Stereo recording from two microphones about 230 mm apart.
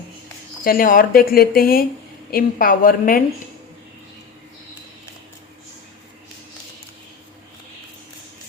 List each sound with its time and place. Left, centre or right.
0.6 s speech: left